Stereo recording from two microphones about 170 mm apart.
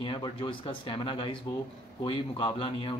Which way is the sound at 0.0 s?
30° left (ahead or behind).